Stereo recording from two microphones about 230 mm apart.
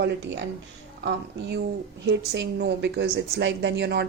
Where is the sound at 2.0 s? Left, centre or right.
Right.